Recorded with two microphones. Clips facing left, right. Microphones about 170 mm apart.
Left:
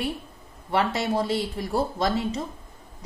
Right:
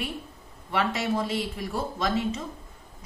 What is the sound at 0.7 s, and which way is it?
Speech, 35° left (ahead or behind).